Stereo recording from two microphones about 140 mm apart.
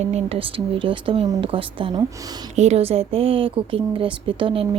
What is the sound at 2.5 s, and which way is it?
Speech, 55° right (ahead or behind).